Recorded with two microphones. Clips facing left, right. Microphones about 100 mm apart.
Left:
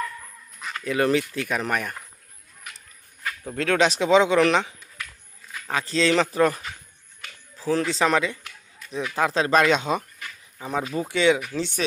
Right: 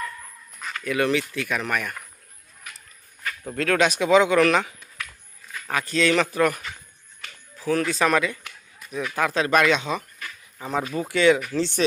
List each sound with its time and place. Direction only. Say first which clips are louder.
0.9 s speech: left 1 dB; 35° left (ahead or behind)
3.5 s speech: even; 20° left (ahead or behind)
5.7 s speech: even; 30° left (ahead or behind)
10.2 s insect: right 1 dB; 15° left (ahead or behind)
11.1 s speech: right 2 dB; 15° left (ahead or behind)